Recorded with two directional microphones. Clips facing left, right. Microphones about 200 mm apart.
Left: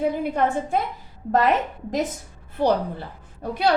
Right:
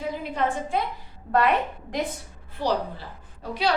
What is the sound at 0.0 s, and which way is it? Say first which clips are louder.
Speech: left 5 dB; 55° left (ahead or behind).